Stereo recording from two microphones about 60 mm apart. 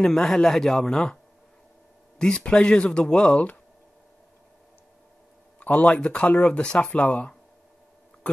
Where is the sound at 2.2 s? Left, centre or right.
Centre.